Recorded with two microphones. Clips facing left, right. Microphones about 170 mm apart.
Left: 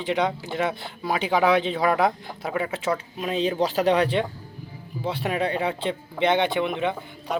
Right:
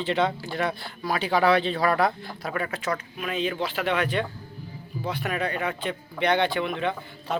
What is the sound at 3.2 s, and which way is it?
Speech, 30° left (ahead or behind).